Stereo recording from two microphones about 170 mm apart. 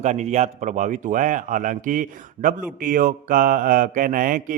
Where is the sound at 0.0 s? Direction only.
40° right (ahead or behind).